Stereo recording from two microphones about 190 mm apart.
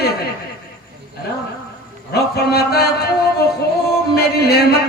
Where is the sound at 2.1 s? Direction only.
55° left (ahead or behind).